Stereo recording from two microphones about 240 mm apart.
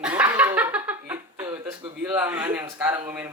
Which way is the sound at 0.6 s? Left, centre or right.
Centre.